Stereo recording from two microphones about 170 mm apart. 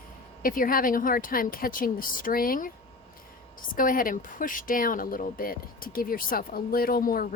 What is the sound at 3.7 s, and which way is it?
Speech, 55° left (ahead or behind).